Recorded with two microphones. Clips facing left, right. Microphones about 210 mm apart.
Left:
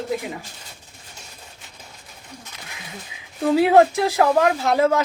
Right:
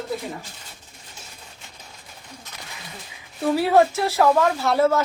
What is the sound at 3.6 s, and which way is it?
Speech, 15° left (ahead or behind).